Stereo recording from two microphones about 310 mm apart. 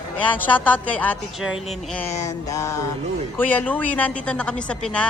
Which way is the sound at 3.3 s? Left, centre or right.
Centre.